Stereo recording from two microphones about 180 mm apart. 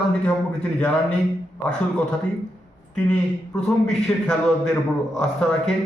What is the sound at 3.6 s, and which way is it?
A man's voice, 5° left (ahead or behind).